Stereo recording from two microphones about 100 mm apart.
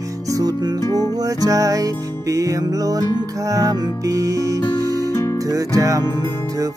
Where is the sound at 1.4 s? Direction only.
35° right (ahead or behind).